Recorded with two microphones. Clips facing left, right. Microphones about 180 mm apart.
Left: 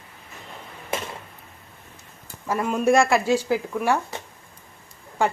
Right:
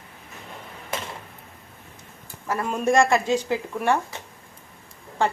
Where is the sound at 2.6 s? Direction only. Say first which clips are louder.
Left 1 dB; 5° left (ahead or behind).